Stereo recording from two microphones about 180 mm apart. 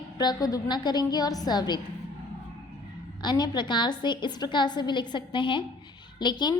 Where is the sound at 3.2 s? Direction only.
25° left (ahead or behind).